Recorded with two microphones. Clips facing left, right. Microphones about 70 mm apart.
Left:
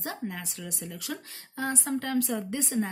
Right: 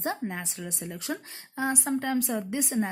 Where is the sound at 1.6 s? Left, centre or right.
Centre.